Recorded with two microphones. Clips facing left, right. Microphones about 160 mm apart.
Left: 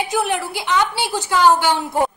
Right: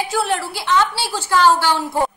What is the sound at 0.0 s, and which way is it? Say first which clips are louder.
A woman's voice: even; 15° left (ahead or behind).